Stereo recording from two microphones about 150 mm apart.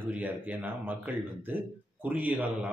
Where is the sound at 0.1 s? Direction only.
10° right (ahead or behind).